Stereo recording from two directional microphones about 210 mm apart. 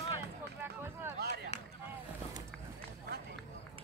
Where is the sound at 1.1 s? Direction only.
50° right (ahead or behind).